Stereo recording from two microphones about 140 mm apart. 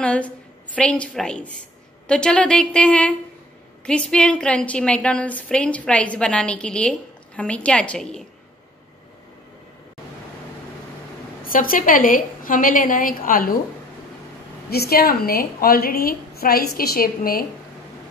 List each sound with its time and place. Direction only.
0.0 s a sound: 10° left (ahead or behind)
0.7 s a woman's voice: 10° left (ahead or behind)
11.4 s a woman's voice: 85° left
14.7 s a woman's voice: 90° left